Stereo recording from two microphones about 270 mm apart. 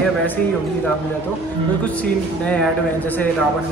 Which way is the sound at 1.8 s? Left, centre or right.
Centre.